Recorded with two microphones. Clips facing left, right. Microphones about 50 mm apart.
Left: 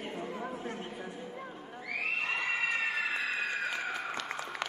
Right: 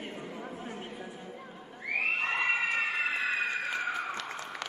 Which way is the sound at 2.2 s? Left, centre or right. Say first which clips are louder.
Right 3 dB; right.